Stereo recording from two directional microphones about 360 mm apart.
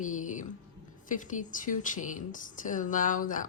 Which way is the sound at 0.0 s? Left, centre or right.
Left.